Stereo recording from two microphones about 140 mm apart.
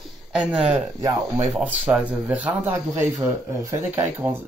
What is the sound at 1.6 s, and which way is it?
Speech, 10° right (ahead or behind).